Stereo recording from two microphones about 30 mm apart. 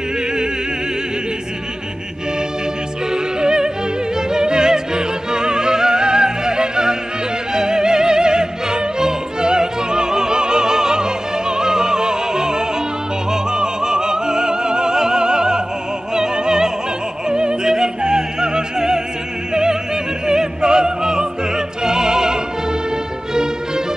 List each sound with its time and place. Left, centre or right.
3.3 s yodeling: right
4.3 s music: right
13.3 s opera: right
17.3 s music: right
20.2 s opera: right